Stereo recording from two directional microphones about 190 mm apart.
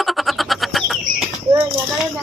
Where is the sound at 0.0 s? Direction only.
Centre (ahead or behind).